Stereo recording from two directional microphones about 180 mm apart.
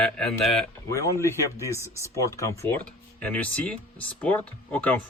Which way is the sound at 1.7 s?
15° right (ahead or behind).